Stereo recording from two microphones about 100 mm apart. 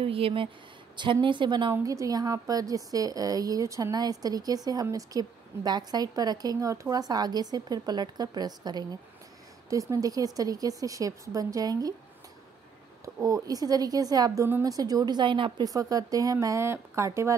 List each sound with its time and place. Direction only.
0.0 s speech: 70° right (ahead or behind)
0.9 s a woman's voice: 55° right (ahead or behind)
1.7 s a woman's voice: 35° right (ahead or behind)
13.0 s a woman's voice: 35° right (ahead or behind); by 15.6 s 55° right (ahead or behind)
15.6 s a woman's voice: 35° right (ahead or behind)